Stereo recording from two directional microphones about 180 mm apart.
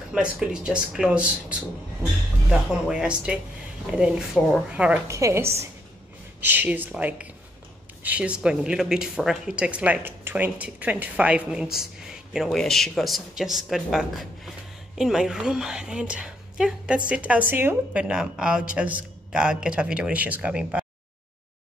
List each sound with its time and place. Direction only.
0.1 s a woman's voice: 5° right (ahead or behind)